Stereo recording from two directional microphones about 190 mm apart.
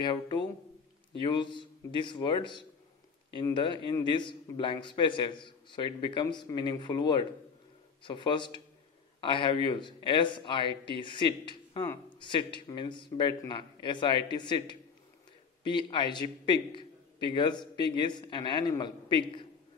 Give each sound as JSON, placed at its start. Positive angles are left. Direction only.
{"t": 0.0, "sound": "a man's voice", "side_deg": 25}